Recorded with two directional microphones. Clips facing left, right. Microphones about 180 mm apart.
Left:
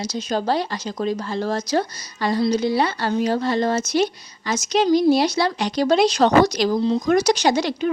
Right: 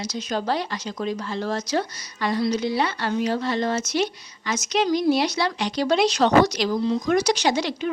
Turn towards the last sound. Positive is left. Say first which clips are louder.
# left 3 dB
turn(degrees=45)  # may be behind; listen again after turning